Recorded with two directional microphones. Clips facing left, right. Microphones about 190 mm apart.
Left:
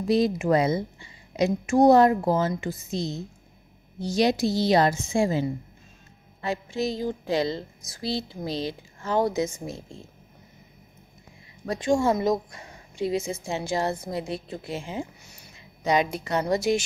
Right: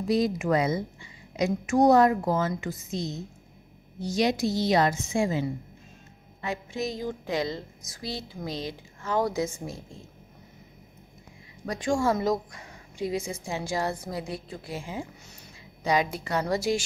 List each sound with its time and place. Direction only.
0.1 s a woman's voice: 25° left (ahead or behind)
11.7 s a woman's voice: 25° left (ahead or behind)